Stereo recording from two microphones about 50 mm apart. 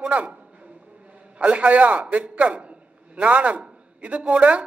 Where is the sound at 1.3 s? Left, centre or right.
Right.